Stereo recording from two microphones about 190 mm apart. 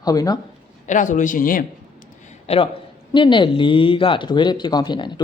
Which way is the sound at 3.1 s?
25° left (ahead or behind).